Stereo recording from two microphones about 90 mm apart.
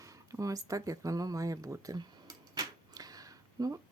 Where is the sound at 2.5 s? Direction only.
45° right (ahead or behind).